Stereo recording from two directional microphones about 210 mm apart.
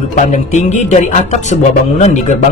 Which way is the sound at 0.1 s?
35° left (ahead or behind).